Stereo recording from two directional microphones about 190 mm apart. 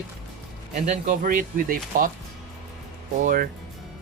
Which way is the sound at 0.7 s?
35° right (ahead or behind).